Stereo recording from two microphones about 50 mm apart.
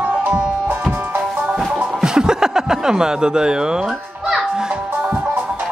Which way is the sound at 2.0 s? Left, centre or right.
Centre.